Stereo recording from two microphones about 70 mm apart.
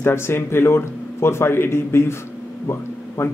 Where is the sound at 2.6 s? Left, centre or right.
Left.